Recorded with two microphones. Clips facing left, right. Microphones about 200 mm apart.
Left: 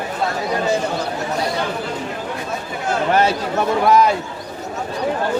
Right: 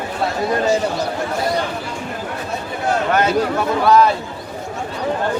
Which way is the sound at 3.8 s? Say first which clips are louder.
Right 2 dB; 15° left (ahead or behind).